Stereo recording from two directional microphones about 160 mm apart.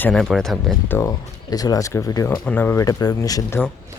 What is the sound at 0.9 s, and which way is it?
Speech, 20° left (ahead or behind).